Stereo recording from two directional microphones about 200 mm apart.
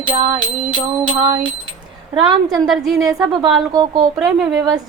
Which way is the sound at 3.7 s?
20° right (ahead or behind).